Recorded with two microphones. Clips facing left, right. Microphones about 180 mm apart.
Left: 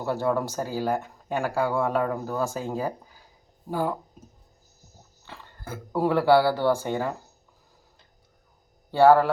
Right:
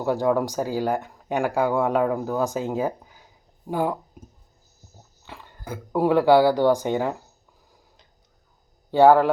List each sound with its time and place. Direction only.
0.0 s speech: 15° right (ahead or behind)
5.2 s speech: 15° right (ahead or behind)
8.9 s speech: 15° right (ahead or behind)